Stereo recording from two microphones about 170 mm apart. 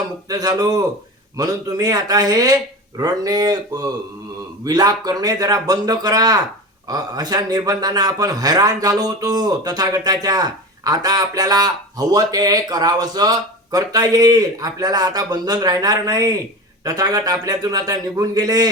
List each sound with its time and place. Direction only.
0.3 s a man's voice: 20° right (ahead or behind)